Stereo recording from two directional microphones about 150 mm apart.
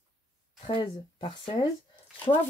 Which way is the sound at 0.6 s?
35° left (ahead or behind).